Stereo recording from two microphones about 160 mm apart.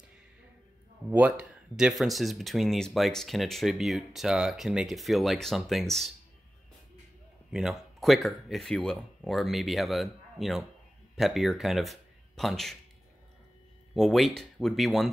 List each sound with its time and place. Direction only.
1.1 s speech: 10° right (ahead or behind)
7.5 s speech: centre (ahead or behind)
13.9 s speech: centre (ahead or behind)